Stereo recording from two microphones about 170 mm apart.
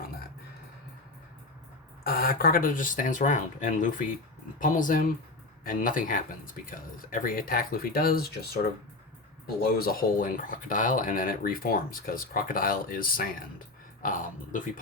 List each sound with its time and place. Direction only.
2.0 s speech: 65° left (ahead or behind)